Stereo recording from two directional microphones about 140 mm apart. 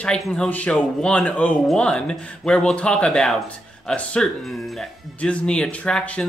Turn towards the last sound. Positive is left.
turn(degrees=5)  # may be behind; listen again after turning